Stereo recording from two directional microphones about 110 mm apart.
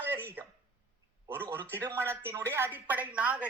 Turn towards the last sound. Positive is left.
turn(degrees=-10)  # may be behind; listen again after turning